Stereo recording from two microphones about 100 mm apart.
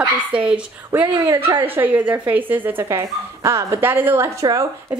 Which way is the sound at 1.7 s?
20° right (ahead or behind).